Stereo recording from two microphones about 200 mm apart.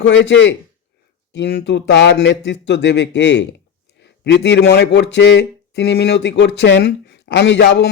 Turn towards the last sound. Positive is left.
turn(degrees=60)  # may be behind; listen again after turning